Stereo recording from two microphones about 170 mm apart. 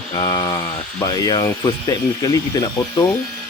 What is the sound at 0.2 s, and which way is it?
Speech, 20° left (ahead or behind).